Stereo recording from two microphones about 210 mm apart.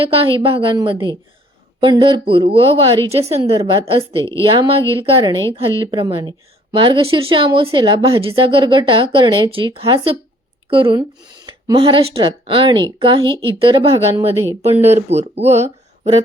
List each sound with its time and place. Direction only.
0.0 s a woman's voice: 25° right (ahead or behind)